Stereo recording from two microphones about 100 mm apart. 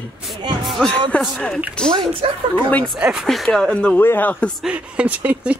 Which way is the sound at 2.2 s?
60° right (ahead or behind).